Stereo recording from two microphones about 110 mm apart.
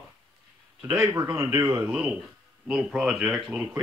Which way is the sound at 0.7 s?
5° right (ahead or behind).